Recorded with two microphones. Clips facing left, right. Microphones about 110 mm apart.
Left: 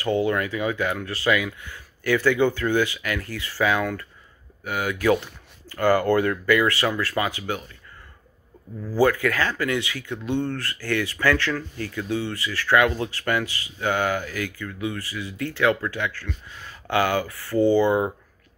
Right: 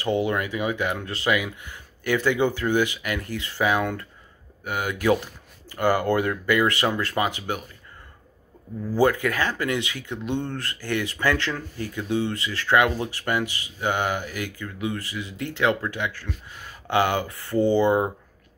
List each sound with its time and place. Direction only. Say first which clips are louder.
0.0 s speech: left 1 dB; 20° right (ahead or behind)
8.9 s speech: left 1 dB; 20° right (ahead or behind)